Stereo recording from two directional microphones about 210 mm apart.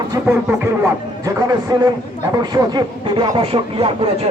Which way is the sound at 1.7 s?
20° right (ahead or behind).